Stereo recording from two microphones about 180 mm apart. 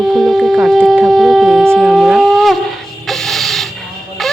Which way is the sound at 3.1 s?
Centre (ahead or behind).